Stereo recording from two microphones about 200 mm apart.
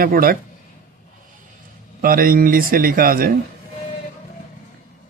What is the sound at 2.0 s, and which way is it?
Speech, 45° right (ahead or behind).